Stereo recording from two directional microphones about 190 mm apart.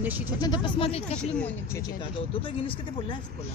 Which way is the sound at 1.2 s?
5° left (ahead or behind).